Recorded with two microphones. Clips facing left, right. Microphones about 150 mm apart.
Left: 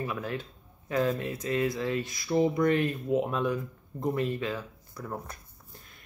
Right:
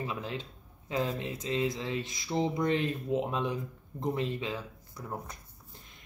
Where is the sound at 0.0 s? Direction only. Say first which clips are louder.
Left 3 dB; 20° right (ahead or behind).